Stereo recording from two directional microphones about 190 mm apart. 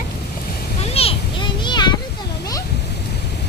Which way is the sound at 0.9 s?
30° left (ahead or behind).